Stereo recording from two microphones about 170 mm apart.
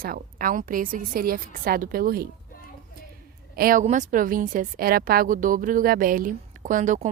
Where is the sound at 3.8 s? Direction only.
45° right (ahead or behind).